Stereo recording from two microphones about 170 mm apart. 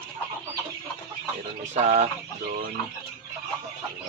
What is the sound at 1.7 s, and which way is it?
Chicken, 40° right (ahead or behind).